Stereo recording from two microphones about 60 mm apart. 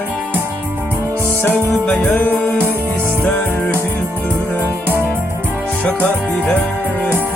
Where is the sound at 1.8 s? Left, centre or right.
Centre.